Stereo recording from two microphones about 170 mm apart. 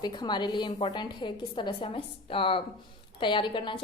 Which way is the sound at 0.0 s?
25° left (ahead or behind).